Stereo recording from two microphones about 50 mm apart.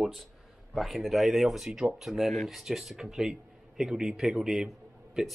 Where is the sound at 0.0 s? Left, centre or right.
Centre.